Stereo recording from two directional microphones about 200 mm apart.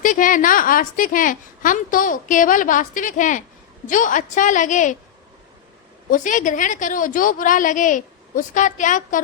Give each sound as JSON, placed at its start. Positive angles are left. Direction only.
{"t": 0.0, "sound": "a woman's voice", "side_deg": 40}
{"t": 6.1, "sound": "a woman's voice", "side_deg": 40}